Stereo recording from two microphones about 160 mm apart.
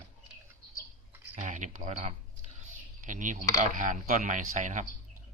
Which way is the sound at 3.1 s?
55° right (ahead or behind).